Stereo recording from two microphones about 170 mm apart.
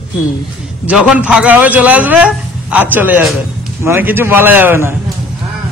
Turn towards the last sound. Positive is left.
turn(degrees=-15)  # may be behind; listen again after turning